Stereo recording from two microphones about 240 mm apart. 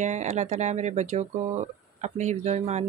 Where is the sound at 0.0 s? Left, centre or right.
Right.